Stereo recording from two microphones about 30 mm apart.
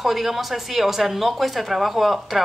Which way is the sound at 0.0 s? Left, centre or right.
Centre.